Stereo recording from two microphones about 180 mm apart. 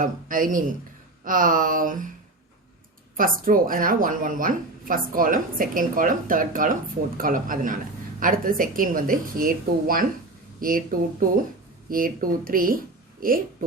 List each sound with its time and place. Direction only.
0.0 s a woman's voice: 50° right (ahead or behind)
3.2 s a woman's voice: 50° right (ahead or behind)
11.9 s a woman's voice: 50° right (ahead or behind)